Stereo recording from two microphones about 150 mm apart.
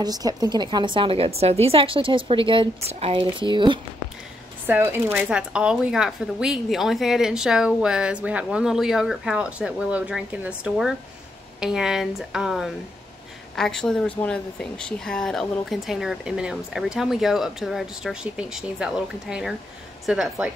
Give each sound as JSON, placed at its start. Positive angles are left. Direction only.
{"t": 0.0, "sound": "a woman's voice", "side_deg": -25}
{"t": 4.6, "sound": "speech", "side_deg": -15}